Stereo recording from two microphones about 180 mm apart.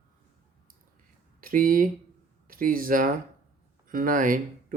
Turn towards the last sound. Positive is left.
turn(degrees=-50)  # may be behind; listen again after turning